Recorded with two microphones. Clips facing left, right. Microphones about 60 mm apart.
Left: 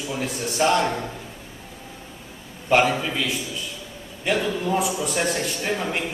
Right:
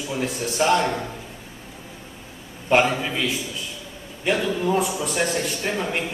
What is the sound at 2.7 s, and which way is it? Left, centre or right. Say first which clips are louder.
A man's voice: even; centre.